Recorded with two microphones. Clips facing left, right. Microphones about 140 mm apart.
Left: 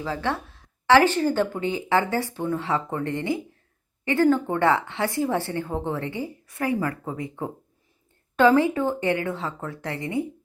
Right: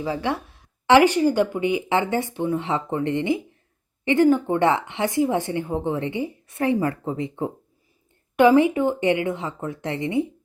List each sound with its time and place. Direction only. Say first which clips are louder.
0.0 s speech: right 2 dB; 15° right (ahead or behind)